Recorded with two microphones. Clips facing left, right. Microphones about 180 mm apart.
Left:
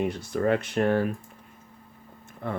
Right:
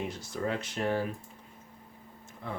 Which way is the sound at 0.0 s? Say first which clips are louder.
Left 8 dB; 60° left (ahead or behind).